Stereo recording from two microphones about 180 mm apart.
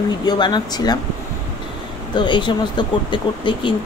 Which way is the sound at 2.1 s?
25° left (ahead or behind).